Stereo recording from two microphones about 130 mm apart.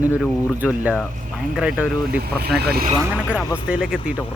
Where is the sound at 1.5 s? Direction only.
5° right (ahead or behind).